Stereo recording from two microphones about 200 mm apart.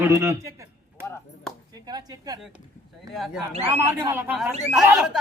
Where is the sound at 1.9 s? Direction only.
20° right (ahead or behind).